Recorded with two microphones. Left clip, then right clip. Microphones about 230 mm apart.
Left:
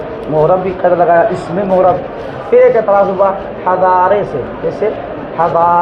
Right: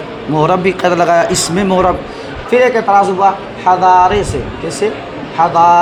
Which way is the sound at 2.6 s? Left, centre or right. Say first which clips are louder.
Left 2 dB; right.